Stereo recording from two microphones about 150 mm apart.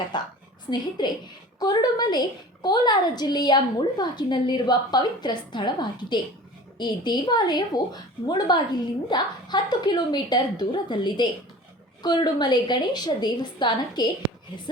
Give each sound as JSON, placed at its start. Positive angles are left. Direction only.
{"t": 0.1, "sound": "a woman's voice", "side_deg": 30}